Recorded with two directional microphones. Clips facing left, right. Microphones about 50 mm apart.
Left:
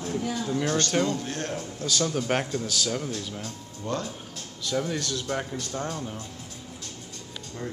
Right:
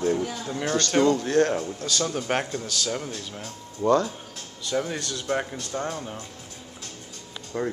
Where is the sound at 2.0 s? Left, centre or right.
Centre.